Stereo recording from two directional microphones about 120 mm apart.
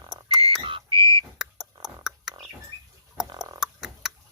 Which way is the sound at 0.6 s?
45° right (ahead or behind).